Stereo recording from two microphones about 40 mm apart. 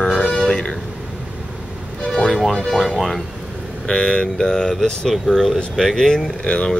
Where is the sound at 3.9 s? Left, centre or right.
Left.